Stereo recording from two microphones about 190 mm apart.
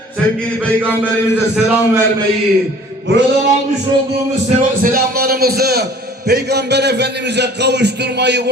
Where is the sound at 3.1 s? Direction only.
65° right (ahead or behind).